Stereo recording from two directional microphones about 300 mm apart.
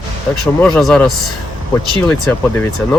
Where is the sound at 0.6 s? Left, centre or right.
Centre.